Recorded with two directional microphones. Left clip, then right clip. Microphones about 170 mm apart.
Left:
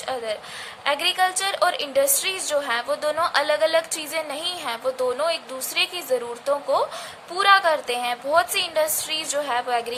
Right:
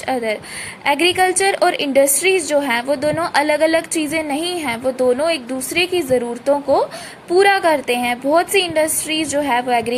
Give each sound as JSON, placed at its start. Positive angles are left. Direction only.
{"t": 0.9, "sound": "a woman's voice", "side_deg": -20}